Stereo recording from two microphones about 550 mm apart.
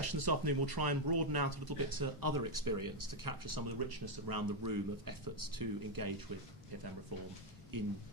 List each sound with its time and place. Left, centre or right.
0.0 s speech: right
7.7 s speech: right